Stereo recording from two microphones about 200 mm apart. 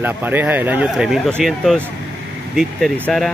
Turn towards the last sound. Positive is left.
turn(degrees=5)  # may be behind; listen again after turning